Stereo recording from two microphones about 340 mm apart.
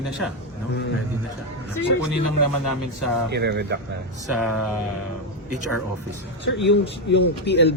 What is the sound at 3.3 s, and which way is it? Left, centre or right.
Speech, right.